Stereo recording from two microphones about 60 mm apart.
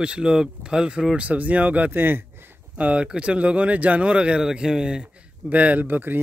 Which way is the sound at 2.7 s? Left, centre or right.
Right.